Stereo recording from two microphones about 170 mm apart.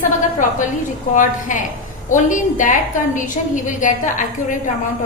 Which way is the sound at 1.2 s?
50° left (ahead or behind).